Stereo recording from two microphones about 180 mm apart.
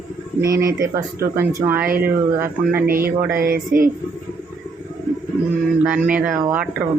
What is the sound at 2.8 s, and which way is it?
Speech, 55° right (ahead or behind).